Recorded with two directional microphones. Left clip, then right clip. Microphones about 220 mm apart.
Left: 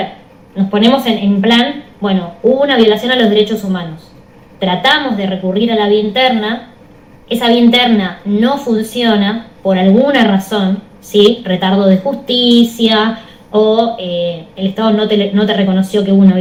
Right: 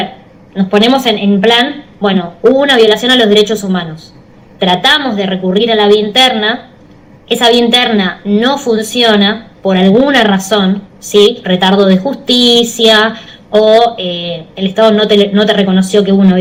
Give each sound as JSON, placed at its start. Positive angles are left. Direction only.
{"t": 0.5, "sound": "a woman's voice", "side_deg": -50}